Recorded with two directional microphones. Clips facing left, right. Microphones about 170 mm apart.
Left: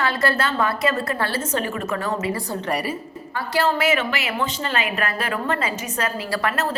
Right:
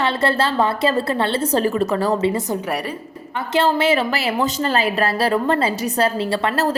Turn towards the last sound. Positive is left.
turn(degrees=-25)  # may be behind; listen again after turning